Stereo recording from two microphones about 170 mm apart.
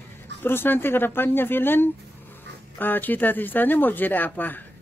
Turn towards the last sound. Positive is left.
turn(degrees=10)  # may be behind; listen again after turning